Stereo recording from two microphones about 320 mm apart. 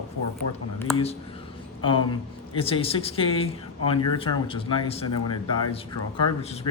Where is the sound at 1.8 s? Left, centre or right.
Centre.